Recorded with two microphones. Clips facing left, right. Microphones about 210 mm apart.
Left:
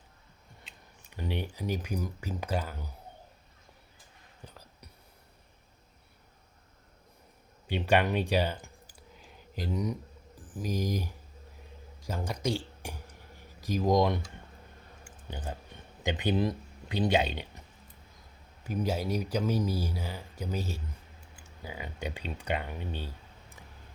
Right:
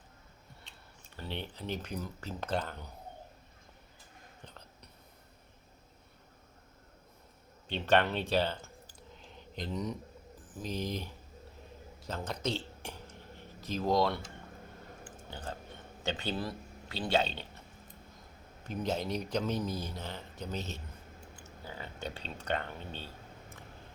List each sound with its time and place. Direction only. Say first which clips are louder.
1.1 s speech: left 5 dB; 15° left (ahead or behind)
4.4 s whispering: left 4 dB; 5° left (ahead or behind)
7.7 s clicking: left 2 dB; 10° left (ahead or behind)
10.5 s speech: left 4 dB; 10° left (ahead or behind)
12.0 s a sound: left 3 dB; 10° left (ahead or behind)
15.3 s speech: left 3 dB; 15° left (ahead or behind)
18.6 s speech: left 3 dB; 10° left (ahead or behind)